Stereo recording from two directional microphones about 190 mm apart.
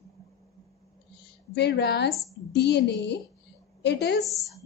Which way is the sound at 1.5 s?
60° left (ahead or behind).